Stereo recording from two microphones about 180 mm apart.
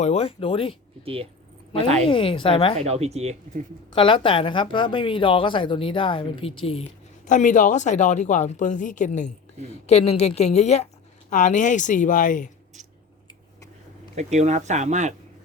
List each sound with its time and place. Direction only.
0.0 s a woman's voice: 35° left (ahead or behind)
1.0 s speech: 30° right (ahead or behind)
2.0 s a woman's voice: 30° left (ahead or behind)
2.7 s speech: 35° right (ahead or behind)
3.9 s a woman's voice: 30° left (ahead or behind)
7.3 s a woman's voice: 45° left (ahead or behind)
14.2 s speech: 40° right (ahead or behind)